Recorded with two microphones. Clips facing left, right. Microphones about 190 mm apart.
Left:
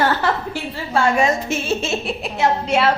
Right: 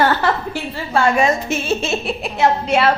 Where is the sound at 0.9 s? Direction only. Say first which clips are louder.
Right 1 dB; 60° right (ahead or behind).